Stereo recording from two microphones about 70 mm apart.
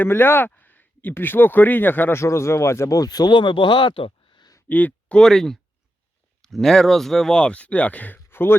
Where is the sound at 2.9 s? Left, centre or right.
Left.